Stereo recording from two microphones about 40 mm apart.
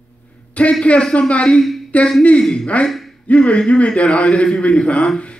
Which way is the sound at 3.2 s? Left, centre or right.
Left.